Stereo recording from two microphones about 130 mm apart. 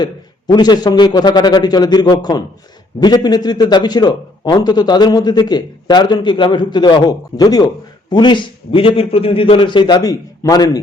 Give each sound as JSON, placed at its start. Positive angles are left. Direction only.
{"t": 0.0, "sound": "a man's voice", "side_deg": 35}